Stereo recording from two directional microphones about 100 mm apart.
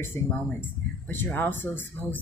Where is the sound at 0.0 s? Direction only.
20° left (ahead or behind).